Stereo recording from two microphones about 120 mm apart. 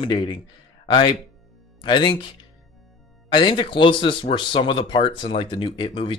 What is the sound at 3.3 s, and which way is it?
Speech, 45° left (ahead or behind).